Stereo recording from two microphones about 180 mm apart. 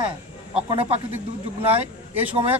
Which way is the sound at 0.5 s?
30° right (ahead or behind).